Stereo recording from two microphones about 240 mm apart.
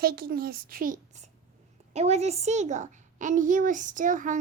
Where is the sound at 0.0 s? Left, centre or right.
Right.